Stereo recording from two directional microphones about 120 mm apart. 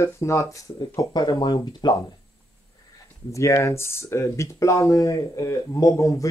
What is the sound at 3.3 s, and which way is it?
Speech, 25° left (ahead or behind).